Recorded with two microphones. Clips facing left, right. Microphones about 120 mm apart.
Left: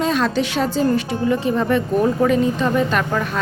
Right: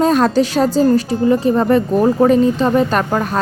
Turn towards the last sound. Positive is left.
turn(degrees=-40)  # may be behind; listen again after turning